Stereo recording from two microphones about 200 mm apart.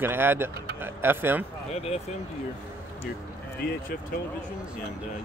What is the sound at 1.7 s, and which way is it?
Speech, 30° left (ahead or behind).